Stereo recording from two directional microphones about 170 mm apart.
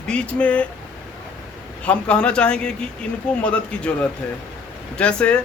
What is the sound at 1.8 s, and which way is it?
Speech, 5° left (ahead or behind).